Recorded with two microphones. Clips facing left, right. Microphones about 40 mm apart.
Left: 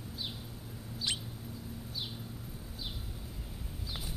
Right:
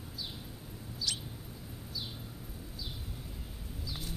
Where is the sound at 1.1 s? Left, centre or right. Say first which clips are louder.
Left 2 dB; left.